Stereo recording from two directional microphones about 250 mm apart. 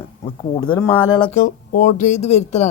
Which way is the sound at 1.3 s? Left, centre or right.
Left.